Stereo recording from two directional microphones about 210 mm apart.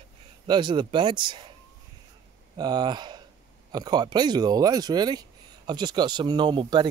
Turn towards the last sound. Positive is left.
turn(degrees=-20)  # may be behind; listen again after turning